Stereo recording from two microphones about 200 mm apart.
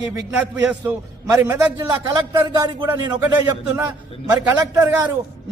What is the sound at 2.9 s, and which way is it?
A man's voice, 10° right (ahead or behind).